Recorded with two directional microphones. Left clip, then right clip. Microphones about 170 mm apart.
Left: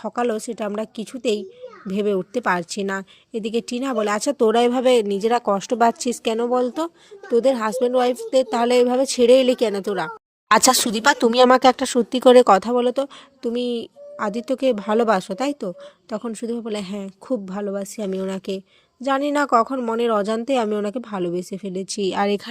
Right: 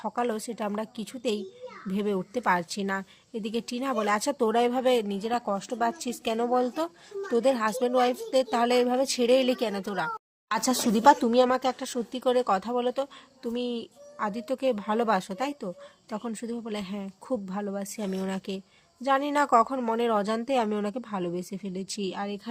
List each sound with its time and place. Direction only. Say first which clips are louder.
0.0 s speech: left 6 dB; 25° left (ahead or behind)
6.3 s speech: left 4 dB; 25° left (ahead or behind)
10.5 s speech: left 11 dB; 55° left (ahead or behind); by 22.1 s 30° left (ahead or behind)
22.1 s speech: left 17 dB; 50° left (ahead or behind)